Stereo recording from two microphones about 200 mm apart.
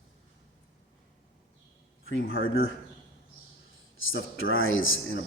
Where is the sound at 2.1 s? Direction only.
75° left (ahead or behind).